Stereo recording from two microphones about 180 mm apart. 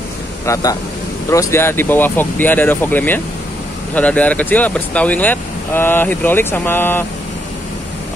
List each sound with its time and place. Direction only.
0.5 s speech: 20° left (ahead or behind)